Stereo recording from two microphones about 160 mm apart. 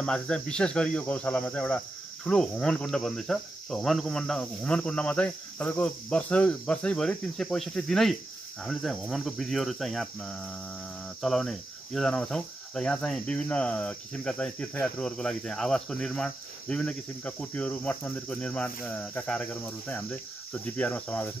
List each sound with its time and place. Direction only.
0.0 s cricket: 5° left (ahead or behind)